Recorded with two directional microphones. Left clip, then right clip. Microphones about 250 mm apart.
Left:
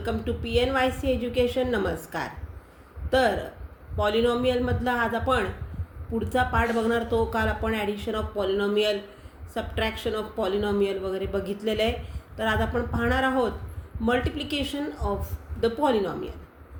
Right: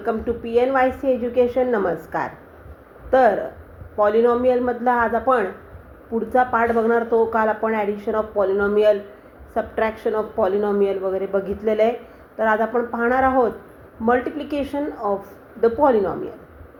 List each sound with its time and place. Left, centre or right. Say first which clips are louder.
0.0 s speech: right 7 dB; left